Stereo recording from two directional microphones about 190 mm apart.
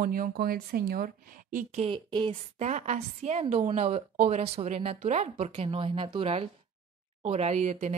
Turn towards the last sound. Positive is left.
turn(degrees=-35)  # may be behind; listen again after turning